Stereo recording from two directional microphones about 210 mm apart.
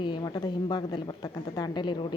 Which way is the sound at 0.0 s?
20° left (ahead or behind).